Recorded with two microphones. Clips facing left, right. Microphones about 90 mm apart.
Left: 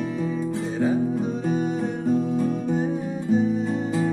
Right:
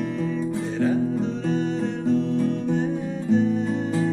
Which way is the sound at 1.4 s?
10° left (ahead or behind).